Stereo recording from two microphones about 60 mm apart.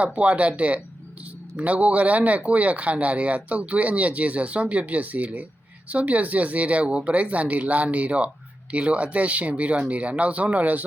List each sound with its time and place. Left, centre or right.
0.0 s speech: right